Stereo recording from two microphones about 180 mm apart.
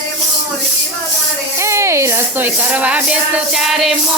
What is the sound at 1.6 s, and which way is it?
Speech, 15° right (ahead or behind).